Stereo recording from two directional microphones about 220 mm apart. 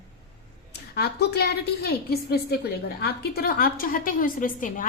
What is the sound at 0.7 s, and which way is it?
A woman's voice, 45° left (ahead or behind).